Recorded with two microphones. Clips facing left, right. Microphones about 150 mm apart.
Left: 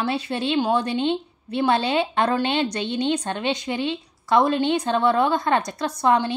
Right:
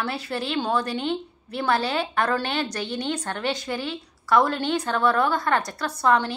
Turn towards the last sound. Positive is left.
turn(degrees=20)  # may be behind; listen again after turning